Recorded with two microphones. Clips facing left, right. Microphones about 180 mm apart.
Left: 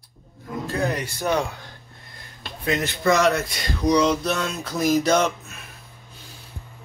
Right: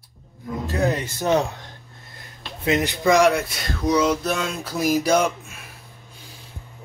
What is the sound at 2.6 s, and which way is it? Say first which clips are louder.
Speech: right 2 dB; 20° right (ahead or behind).